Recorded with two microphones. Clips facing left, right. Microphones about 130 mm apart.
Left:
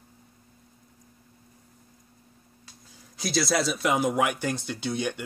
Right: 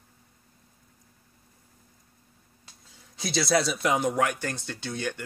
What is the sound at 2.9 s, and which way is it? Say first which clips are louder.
A man's voice: left 2 dB; centre (ahead or behind).